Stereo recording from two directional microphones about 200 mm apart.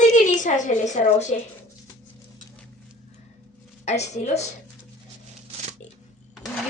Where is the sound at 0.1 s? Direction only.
40° left (ahead or behind).